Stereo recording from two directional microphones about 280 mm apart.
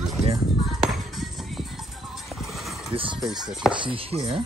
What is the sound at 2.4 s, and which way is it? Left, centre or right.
Horse, centre.